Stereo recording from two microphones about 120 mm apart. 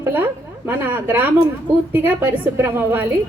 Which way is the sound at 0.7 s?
15° right (ahead or behind).